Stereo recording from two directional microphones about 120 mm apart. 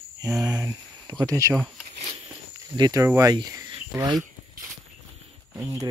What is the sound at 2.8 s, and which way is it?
Speech, 30° right (ahead or behind).